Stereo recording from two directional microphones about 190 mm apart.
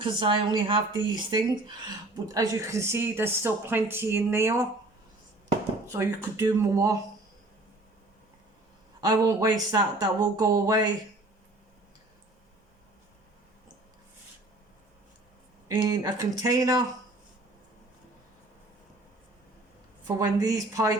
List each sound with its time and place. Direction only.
0.0 s speech: 25° right (ahead or behind)
5.9 s speech: 15° right (ahead or behind)
9.0 s speech: 20° right (ahead or behind)
15.7 s speech: 15° right (ahead or behind)
20.1 s speech: 15° right (ahead or behind)